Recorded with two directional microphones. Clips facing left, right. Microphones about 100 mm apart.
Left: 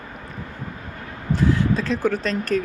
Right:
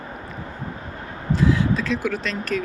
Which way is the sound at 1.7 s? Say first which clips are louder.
Left 2 dB; 40° left (ahead or behind).